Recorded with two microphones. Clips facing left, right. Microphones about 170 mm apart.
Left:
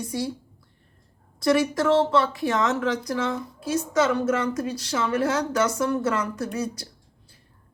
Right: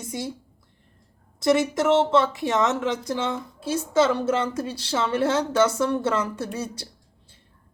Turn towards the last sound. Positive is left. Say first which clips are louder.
# left 2 dB
turn(degrees=-30)  # may be behind; listen again after turning